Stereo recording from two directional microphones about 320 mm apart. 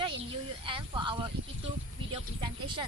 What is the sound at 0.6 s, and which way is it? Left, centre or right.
Speech, centre.